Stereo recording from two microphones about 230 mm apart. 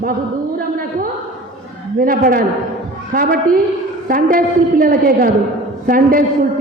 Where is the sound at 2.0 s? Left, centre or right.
Right.